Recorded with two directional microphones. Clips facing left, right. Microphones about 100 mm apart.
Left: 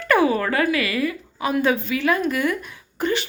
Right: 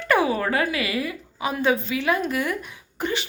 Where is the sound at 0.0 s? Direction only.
20° right (ahead or behind).